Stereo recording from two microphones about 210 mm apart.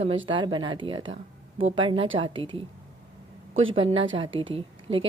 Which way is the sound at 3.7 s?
25° right (ahead or behind).